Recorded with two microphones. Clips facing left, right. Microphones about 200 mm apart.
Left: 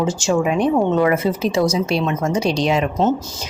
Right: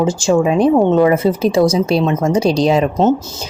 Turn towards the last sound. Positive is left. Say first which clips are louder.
# right 5 dB
turn(degrees=-35)  # may be behind; listen again after turning